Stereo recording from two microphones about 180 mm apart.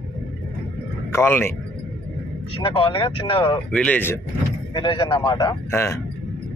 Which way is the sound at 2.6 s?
30° left (ahead or behind).